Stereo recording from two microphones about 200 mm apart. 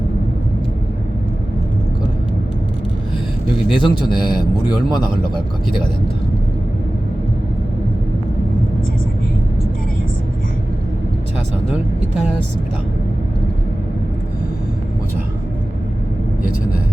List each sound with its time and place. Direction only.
3.7 s a man's voice: 25° left (ahead or behind)